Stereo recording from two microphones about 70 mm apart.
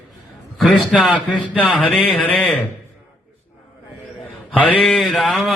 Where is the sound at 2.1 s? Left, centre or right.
Left.